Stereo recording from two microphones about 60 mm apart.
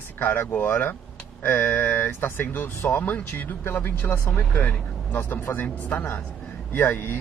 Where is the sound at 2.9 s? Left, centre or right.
Left.